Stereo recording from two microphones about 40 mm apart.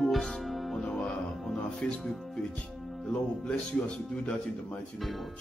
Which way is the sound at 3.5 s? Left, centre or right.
Left.